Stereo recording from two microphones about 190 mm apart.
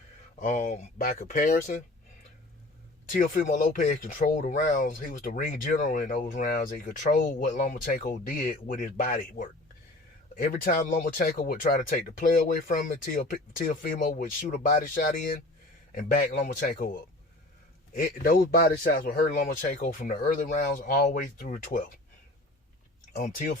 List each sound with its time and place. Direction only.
0.3 s speech: 40° left (ahead or behind)
3.1 s speech: 45° left (ahead or behind)
17.9 s speech: 50° left (ahead or behind)
23.1 s speech: 45° left (ahead or behind)